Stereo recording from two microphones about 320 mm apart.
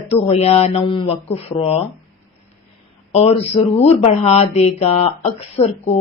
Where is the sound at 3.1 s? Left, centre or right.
Centre.